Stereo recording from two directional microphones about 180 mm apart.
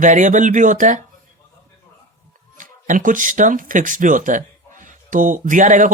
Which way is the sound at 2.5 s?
45° right (ahead or behind).